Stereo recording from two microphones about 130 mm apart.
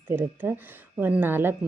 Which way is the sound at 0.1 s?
15° right (ahead or behind).